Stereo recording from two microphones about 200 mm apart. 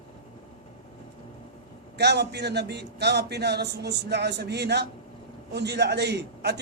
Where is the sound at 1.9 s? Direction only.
55° right (ahead or behind).